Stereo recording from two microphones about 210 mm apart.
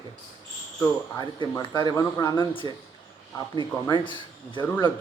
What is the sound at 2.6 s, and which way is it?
Speech, 20° right (ahead or behind).